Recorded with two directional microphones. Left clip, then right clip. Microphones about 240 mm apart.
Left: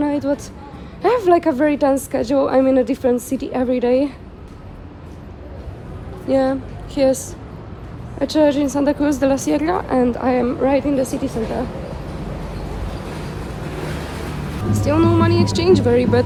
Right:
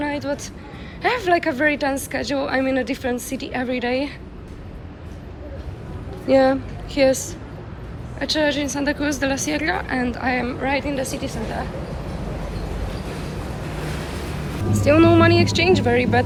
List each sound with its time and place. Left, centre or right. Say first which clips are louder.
0.0 s a sound: left 5 dB; left
1.0 s a woman's voice: left 4 dB; left
6.2 s a woman's voice: right 2 dB; centre
14.7 s speech: right 2 dB; centre